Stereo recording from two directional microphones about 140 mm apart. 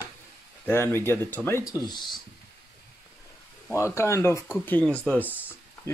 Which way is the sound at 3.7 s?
20° left (ahead or behind).